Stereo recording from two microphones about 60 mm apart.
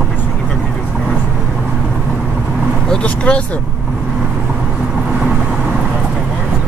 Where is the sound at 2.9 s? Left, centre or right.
Centre.